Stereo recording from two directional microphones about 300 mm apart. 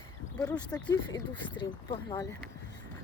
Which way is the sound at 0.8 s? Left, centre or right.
Centre.